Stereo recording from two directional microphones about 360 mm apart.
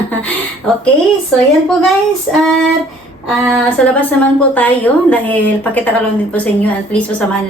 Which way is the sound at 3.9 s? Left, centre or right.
Centre.